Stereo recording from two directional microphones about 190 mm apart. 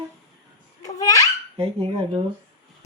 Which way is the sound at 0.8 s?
20° left (ahead or behind).